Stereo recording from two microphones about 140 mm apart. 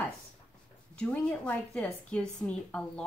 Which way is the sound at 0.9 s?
10° left (ahead or behind).